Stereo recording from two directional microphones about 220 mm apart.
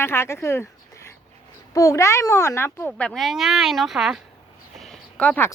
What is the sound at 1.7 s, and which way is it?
A child's voice, 15° left (ahead or behind).